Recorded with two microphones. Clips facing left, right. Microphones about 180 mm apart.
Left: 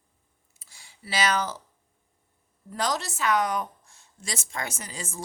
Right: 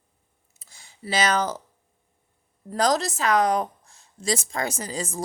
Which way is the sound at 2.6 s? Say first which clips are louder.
Right 7 dB; 40° right (ahead or behind).